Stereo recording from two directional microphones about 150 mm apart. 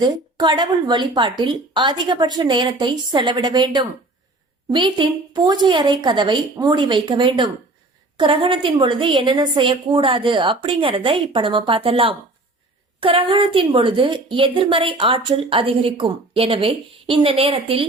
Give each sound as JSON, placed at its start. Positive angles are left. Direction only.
{"t": 0.0, "sound": "a woman's voice", "side_deg": -30}